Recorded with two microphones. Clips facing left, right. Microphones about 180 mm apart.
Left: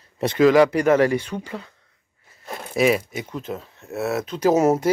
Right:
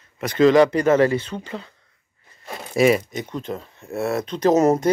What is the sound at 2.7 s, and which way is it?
Speech, centre (ahead or behind).